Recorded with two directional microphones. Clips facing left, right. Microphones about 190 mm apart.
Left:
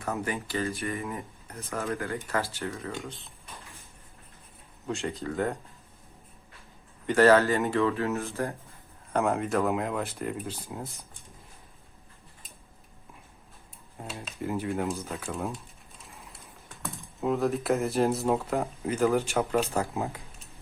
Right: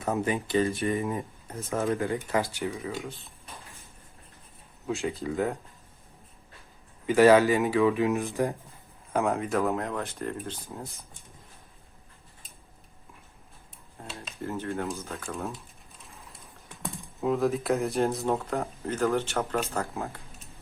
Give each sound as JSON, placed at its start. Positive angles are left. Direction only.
{"t": 0.0, "sound": "speech", "side_deg": -20}
{"t": 4.9, "sound": "speech", "side_deg": 0}
{"t": 7.1, "sound": "speech", "side_deg": -10}
{"t": 9.1, "sound": "speech", "side_deg": 0}
{"t": 14.0, "sound": "dishes", "side_deg": 10}
{"t": 15.0, "sound": "speech", "side_deg": 0}
{"t": 17.2, "sound": "speech", "side_deg": 0}
{"t": 19.1, "sound": "dishes", "side_deg": 10}